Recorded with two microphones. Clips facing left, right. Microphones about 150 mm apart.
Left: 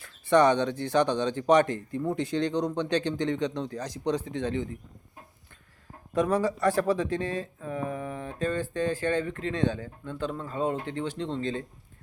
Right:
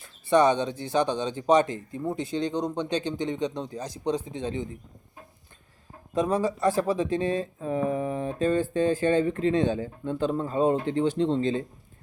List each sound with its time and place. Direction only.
0.0 s speech: 10° right (ahead or behind)
6.3 s speech: 15° right (ahead or behind)